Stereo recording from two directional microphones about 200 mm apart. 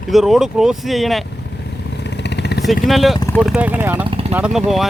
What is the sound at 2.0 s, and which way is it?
Vehicle, 60° left (ahead or behind).